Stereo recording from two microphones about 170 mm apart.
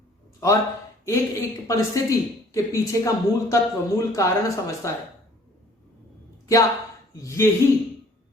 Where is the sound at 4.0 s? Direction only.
20° left (ahead or behind).